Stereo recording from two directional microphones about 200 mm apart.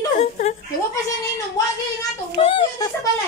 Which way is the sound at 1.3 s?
15° left (ahead or behind).